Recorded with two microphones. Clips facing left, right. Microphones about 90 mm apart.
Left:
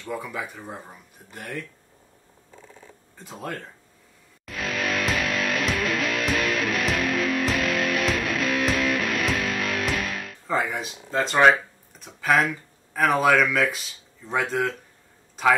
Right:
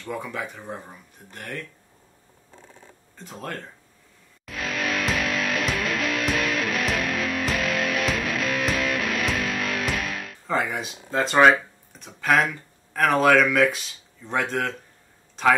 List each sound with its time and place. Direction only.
0.0 s speech: 5° left (ahead or behind)
3.3 s speech: 10° left (ahead or behind)
4.5 s music: centre (ahead or behind)
12.9 s speech: 5° left (ahead or behind)